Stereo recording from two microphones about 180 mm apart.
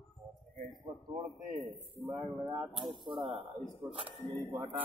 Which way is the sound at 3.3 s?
30° right (ahead or behind).